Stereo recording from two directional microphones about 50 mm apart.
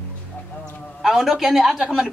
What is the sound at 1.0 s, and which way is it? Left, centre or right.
Speech, centre.